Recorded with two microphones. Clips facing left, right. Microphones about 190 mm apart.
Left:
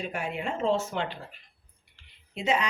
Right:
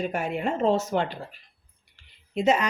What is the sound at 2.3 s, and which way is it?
Speech, 45° right (ahead or behind).